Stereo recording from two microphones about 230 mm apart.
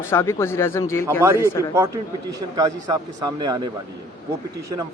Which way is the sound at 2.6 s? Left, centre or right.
Centre.